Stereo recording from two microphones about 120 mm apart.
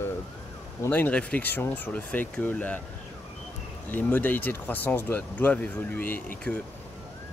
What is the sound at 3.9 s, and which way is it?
Speech, 15° left (ahead or behind).